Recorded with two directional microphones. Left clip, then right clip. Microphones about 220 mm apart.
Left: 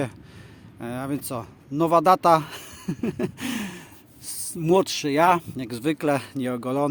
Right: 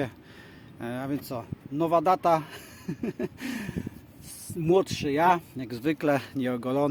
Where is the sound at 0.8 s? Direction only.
25° left (ahead or behind).